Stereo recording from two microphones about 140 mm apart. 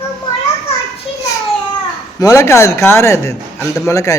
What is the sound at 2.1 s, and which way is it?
A man's voice, 25° left (ahead or behind).